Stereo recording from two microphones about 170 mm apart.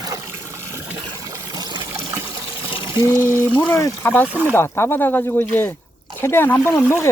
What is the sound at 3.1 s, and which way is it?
Speech, 15° right (ahead or behind).